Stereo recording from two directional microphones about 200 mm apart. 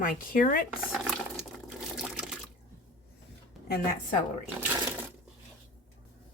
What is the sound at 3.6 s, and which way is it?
Speech, 50° left (ahead or behind).